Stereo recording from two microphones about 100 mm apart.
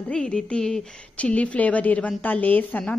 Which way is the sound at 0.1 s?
10° left (ahead or behind).